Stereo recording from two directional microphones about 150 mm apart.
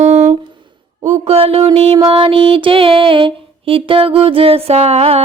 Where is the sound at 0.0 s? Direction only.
50° right (ahead or behind).